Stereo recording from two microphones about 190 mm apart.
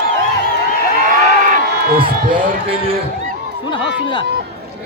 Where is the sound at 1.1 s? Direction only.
45° right (ahead or behind).